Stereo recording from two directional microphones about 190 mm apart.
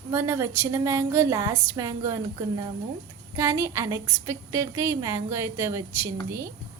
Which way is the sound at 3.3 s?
15° right (ahead or behind).